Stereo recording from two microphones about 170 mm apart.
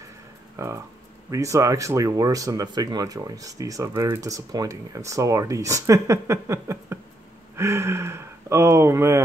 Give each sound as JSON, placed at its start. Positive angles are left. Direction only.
{"t": 0.6, "sound": "speech", "side_deg": -15}